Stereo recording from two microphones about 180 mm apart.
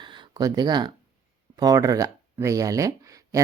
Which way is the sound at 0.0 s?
25° right (ahead or behind).